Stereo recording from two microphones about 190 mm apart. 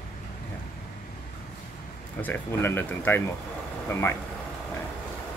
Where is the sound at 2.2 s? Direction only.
10° left (ahead or behind).